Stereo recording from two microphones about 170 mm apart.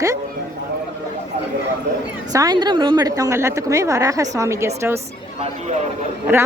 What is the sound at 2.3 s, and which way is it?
A woman's voice, 25° right (ahead or behind).